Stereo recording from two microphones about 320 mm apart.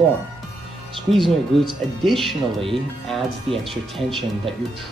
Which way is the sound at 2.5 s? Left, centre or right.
Centre.